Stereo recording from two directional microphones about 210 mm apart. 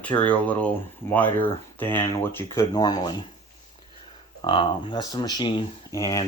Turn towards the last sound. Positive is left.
turn(degrees=15)  # may be behind; listen again after turning